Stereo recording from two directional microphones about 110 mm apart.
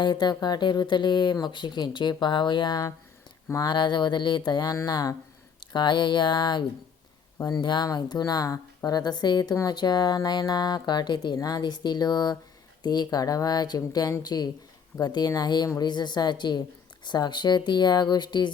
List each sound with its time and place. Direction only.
0.0 s a woman's voice: 40° left (ahead or behind)